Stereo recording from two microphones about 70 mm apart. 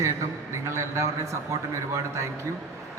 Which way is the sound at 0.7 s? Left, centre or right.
Right.